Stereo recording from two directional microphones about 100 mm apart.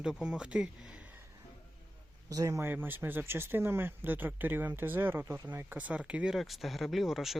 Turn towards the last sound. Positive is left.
turn(degrees=0)  # may be behind; listen again after turning